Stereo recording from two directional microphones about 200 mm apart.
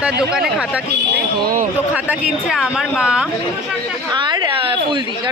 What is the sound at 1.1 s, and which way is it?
Speech, 45° right (ahead or behind).